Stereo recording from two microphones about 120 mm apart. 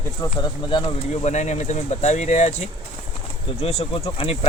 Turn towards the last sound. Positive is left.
turn(degrees=50)  # may be behind; listen again after turning